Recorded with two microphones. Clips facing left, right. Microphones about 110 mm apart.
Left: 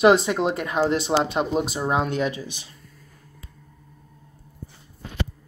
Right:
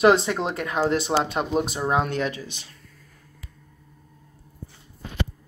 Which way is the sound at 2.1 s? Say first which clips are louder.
Left 2 dB; 15° left (ahead or behind).